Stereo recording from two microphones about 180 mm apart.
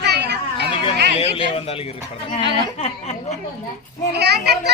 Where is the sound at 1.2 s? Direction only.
35° left (ahead or behind).